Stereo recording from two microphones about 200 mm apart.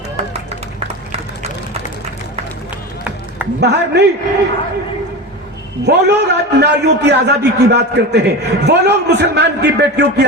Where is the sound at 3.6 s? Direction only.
60° right (ahead or behind).